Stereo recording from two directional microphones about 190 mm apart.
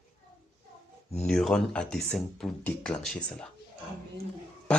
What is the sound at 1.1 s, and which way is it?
Speech, 5° left (ahead or behind).